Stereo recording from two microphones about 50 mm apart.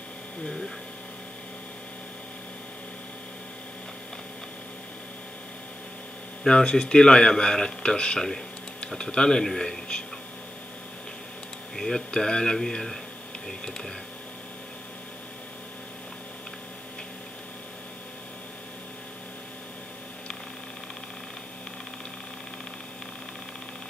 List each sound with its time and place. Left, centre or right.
0.4 s speech: centre
6.4 s speech: centre
11.7 s speech: centre